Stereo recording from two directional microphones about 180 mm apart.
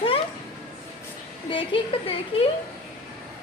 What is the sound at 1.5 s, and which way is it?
Speech, 30° left (ahead or behind).